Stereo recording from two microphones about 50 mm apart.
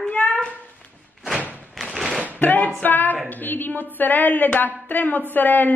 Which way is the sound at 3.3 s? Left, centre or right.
Left.